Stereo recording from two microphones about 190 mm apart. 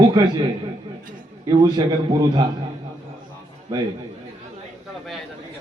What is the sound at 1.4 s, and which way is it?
A man's voice, 25° right (ahead or behind).